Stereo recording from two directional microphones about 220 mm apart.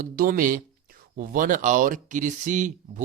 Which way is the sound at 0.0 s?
40° right (ahead or behind).